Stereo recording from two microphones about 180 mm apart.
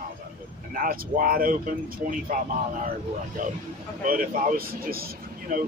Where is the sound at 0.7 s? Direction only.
50° right (ahead or behind).